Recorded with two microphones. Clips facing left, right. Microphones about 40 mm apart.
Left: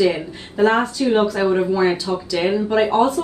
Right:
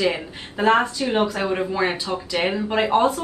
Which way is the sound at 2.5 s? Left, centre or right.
Centre.